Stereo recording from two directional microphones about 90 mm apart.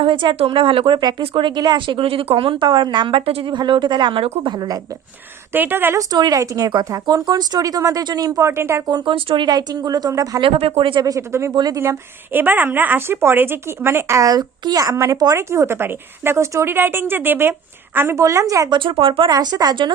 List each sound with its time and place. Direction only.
0.0 s speech: 65° right (ahead or behind)
2.0 s speech: 90° right; by 4.8 s 50° right (ahead or behind)
5.5 s a woman's voice: 20° right (ahead or behind)
6.0 s speech: 50° right (ahead or behind)
8.4 s a woman's voice: 30° right (ahead or behind)
9.0 s speech: 60° right (ahead or behind); by 10.4 s 40° right (ahead or behind)
10.4 s speech: 90° right
11.0 s speech: 35° right (ahead or behind)
11.5 s speech: 50° right (ahead or behind)
11.8 s a woman's voice: 25° right (ahead or behind)
18.7 s speech: 75° right (ahead or behind); by 19.3 s 90° right
19.3 s speech: 50° right (ahead or behind)